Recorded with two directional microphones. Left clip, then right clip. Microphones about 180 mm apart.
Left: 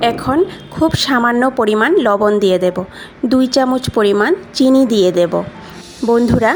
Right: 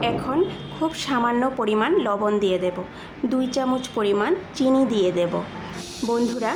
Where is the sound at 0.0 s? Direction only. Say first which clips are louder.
Left 8 dB; 40° left (ahead or behind).